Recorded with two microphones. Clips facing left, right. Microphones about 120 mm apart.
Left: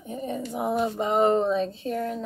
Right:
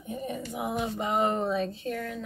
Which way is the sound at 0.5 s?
40° left (ahead or behind).